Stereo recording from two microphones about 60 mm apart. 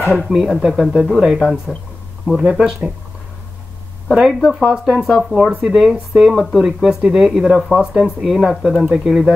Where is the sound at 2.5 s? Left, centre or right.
Centre.